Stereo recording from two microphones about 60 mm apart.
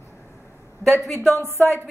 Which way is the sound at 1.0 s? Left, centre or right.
Centre.